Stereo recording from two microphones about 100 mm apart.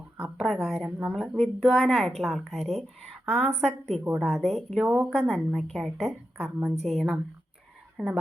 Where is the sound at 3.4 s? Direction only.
90° right.